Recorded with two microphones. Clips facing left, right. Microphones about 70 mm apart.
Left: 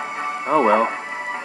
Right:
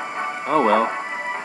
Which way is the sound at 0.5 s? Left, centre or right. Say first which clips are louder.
Left 1 dB; centre.